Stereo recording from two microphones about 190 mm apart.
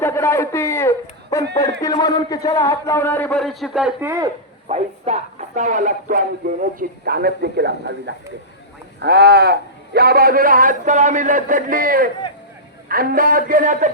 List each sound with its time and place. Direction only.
0.0 s speech: 15° left (ahead or behind); by 4.1 s 5° right (ahead or behind)
4.7 s speech: 35° right (ahead or behind)